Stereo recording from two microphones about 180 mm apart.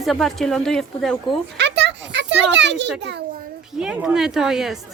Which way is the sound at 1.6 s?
75° right (ahead or behind).